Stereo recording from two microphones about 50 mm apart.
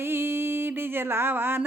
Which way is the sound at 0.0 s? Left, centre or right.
Right.